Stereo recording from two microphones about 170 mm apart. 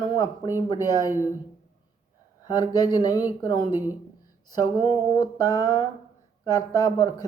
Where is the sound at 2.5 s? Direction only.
25° left (ahead or behind).